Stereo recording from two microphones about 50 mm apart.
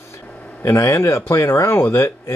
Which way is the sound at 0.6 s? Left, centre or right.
Left.